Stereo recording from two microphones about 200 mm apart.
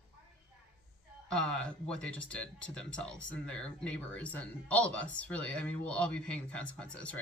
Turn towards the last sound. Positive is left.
turn(degrees=5)  # may be behind; listen again after turning